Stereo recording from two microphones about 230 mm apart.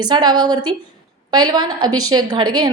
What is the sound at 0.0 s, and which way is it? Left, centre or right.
A woman's voice, centre.